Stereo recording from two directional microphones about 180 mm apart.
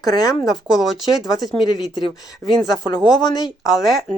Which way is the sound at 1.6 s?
25° left (ahead or behind).